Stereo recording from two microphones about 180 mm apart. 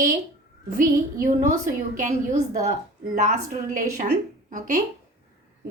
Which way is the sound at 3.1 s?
40° right (ahead or behind).